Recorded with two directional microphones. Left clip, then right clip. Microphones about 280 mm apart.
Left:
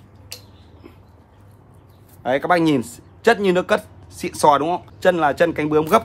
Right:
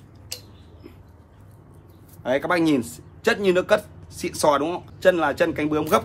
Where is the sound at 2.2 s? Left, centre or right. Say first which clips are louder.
Left 4 dB; left.